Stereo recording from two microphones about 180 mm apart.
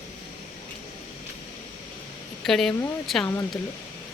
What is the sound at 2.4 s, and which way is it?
Speech, centre (ahead or behind).